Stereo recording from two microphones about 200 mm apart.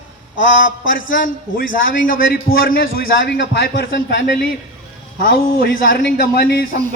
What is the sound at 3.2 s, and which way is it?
Speech, 60° left (ahead or behind).